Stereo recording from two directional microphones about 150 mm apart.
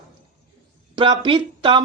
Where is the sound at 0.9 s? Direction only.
35° right (ahead or behind).